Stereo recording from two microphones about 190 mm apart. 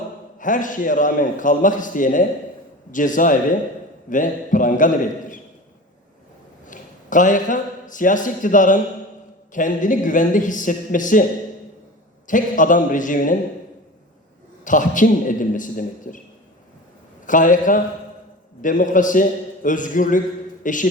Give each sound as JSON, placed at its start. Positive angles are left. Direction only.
{"t": 0.3, "sound": "a man's voice", "side_deg": 45}
{"t": 6.7, "sound": "a man's voice", "side_deg": 45}
{"t": 12.3, "sound": "a man's voice", "side_deg": 45}
{"t": 14.6, "sound": "a man's voice", "side_deg": 45}
{"t": 17.2, "sound": "a man's voice", "side_deg": 45}